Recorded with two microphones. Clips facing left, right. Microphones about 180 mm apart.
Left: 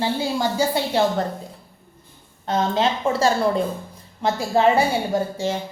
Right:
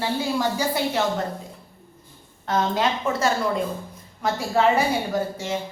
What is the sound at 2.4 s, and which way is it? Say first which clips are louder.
A woman's voice: left 2 dB; 25° left (ahead or behind).